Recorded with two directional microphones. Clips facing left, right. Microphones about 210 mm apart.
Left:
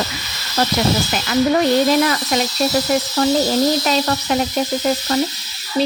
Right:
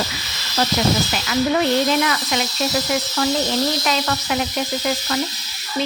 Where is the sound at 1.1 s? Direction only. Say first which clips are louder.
Left 3 dB; 45° left (ahead or behind).